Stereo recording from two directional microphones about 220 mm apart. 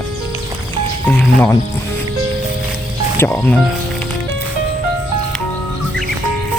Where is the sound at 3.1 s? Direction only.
10° left (ahead or behind).